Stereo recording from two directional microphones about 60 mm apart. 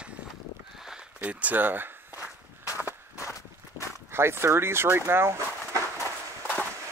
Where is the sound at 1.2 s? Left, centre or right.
Right.